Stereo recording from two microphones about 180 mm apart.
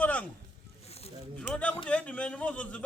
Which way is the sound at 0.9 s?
35° left (ahead or behind).